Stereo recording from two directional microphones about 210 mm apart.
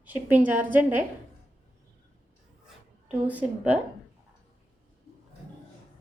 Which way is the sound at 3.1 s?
5° right (ahead or behind).